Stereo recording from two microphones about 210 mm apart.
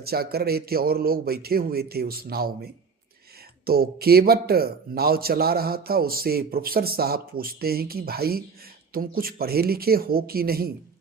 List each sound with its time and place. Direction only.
0.0 s a man's voice: 45° right (ahead or behind)
3.7 s a man's voice: 45° right (ahead or behind)